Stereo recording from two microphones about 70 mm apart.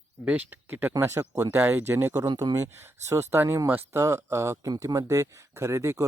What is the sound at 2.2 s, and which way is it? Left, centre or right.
Speech, right.